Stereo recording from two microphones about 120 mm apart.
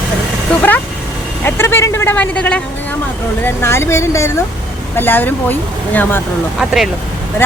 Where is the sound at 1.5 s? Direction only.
20° left (ahead or behind).